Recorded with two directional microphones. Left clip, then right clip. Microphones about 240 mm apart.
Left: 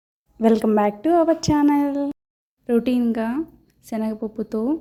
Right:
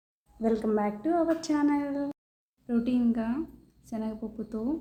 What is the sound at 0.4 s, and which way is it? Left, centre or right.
A woman's voice, left.